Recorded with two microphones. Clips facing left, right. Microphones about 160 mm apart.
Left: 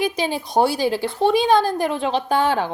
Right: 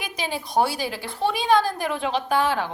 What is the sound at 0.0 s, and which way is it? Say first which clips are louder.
A woman's voice: left 8 dB; 25° left (ahead or behind).